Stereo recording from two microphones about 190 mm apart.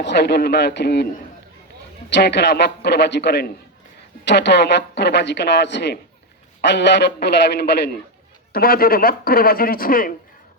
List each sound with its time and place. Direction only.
0.0 s speech: 65° left (ahead or behind)
2.0 s speech: 65° left (ahead or behind); by 10.1 s 50° left (ahead or behind)